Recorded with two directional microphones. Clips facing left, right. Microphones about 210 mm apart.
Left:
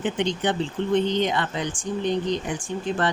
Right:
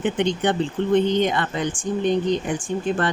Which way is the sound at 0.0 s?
55° right (ahead or behind).